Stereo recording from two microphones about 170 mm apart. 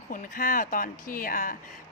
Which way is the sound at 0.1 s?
55° left (ahead or behind).